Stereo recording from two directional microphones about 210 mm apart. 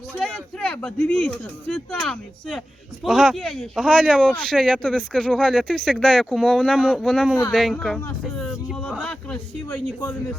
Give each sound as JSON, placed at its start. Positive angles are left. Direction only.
{"t": 0.1, "sound": "speech", "side_deg": 5}